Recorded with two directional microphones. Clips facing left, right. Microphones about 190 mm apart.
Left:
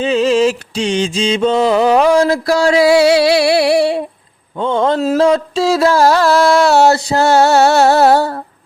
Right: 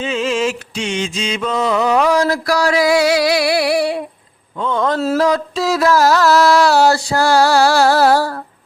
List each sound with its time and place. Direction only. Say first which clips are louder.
0.0 s mantra: left 6 dB; 35° left (ahead or behind)